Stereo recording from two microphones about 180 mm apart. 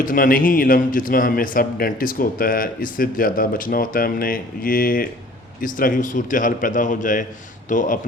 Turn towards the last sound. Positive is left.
turn(degrees=50)  # may be behind; listen again after turning